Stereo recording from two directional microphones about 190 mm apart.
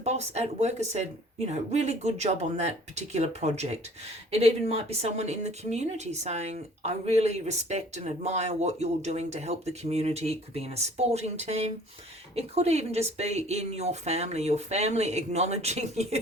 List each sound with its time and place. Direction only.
0.0 s speech: 35° right (ahead or behind)